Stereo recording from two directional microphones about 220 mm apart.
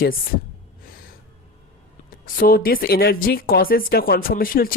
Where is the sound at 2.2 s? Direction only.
40° left (ahead or behind).